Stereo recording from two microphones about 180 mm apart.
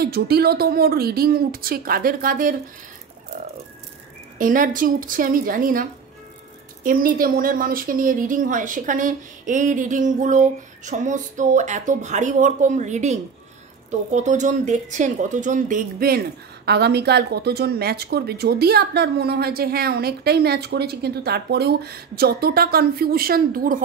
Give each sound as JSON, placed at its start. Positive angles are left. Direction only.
{"t": 0.0, "sound": "a woman's voice", "side_deg": -60}
{"t": 4.4, "sound": "a woman's voice", "side_deg": -50}
{"t": 16.6, "sound": "a woman's voice", "side_deg": -65}